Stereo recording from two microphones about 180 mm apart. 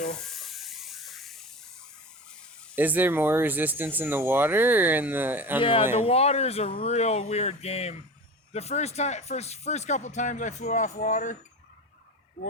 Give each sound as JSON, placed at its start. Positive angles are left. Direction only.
{"t": 0.2, "sound": "a sound", "side_deg": 0}
{"t": 2.7, "sound": "speech", "side_deg": -10}
{"t": 6.0, "sound": "speech", "side_deg": 35}